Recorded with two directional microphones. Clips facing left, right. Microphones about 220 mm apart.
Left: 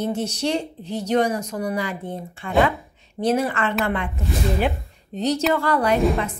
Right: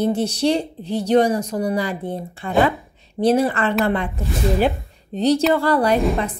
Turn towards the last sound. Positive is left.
turn(degrees=-35)  # may be behind; listen again after turning